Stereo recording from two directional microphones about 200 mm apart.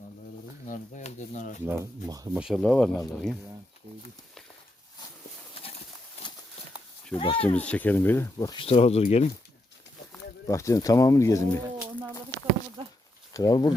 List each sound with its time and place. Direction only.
0.7 s speech: 35° left (ahead or behind)
1.6 s speech: 15° right (ahead or behind)
2.4 s speech: centre (ahead or behind)
7.2 s speech: 25° left (ahead or behind)
7.4 s speech: 5° left (ahead or behind)
8.6 s speech: 30° left (ahead or behind)
10.4 s speech: 15° left (ahead or behind)
13.3 s speech: 20° left (ahead or behind)